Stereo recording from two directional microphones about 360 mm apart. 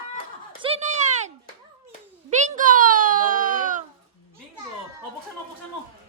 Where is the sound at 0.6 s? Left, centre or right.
Centre.